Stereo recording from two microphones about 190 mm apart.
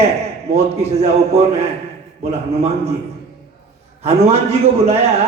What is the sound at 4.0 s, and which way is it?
A man's voice, 35° right (ahead or behind).